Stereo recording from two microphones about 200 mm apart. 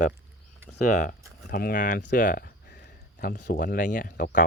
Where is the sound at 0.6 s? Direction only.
40° left (ahead or behind).